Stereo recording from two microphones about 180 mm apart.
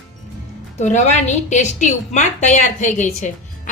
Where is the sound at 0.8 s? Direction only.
40° left (ahead or behind).